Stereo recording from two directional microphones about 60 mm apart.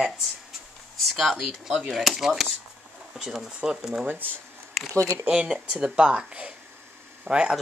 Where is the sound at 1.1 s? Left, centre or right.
Centre.